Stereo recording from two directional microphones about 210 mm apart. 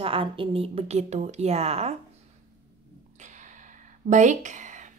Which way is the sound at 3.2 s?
35° right (ahead or behind).